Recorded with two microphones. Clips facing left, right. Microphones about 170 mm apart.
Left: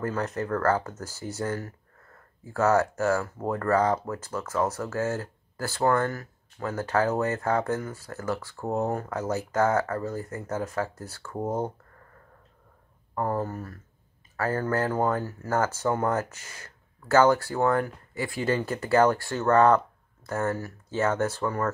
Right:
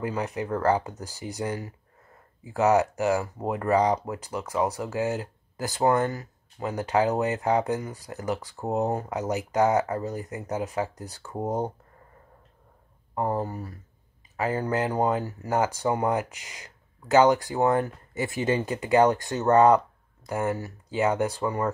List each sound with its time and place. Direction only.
0.0 s speech: 15° right (ahead or behind)
13.1 s speech: 15° right (ahead or behind)